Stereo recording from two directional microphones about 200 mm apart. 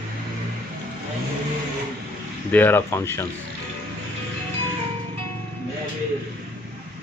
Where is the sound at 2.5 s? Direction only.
10° left (ahead or behind).